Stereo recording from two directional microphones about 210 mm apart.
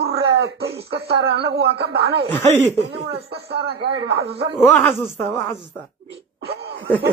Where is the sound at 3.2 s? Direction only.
50° right (ahead or behind).